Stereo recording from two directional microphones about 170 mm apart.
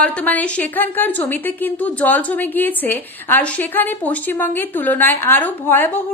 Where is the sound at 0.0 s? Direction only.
10° left (ahead or behind).